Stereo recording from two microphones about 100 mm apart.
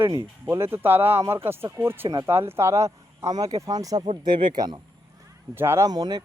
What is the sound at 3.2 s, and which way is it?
Speech, 40° right (ahead or behind).